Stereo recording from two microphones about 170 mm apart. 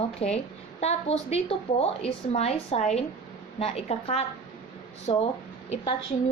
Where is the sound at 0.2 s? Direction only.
40° left (ahead or behind).